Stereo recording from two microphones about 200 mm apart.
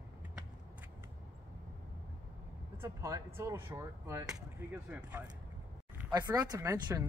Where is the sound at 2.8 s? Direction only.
15° right (ahead or behind).